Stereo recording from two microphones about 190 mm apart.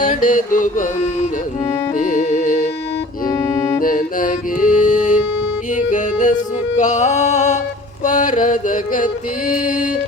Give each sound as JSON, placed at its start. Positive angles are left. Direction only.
{"t": 0.0, "sound": "music", "side_deg": 45}
{"t": 3.2, "sound": "music", "side_deg": 10}
{"t": 3.8, "sound": "music", "side_deg": 45}